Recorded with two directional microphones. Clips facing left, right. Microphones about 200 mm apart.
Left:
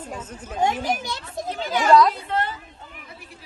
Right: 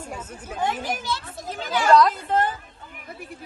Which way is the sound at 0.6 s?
45° left (ahead or behind).